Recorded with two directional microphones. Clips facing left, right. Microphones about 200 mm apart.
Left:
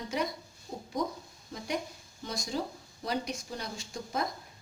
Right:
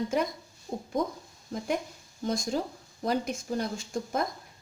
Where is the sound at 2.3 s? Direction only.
50° right (ahead or behind).